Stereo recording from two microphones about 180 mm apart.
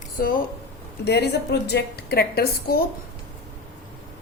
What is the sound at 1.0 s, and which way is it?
A woman's voice, 65° left (ahead or behind).